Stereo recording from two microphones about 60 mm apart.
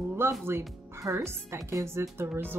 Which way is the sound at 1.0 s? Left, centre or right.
Right.